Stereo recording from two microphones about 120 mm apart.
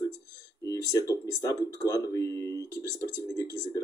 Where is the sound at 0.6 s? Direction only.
25° left (ahead or behind).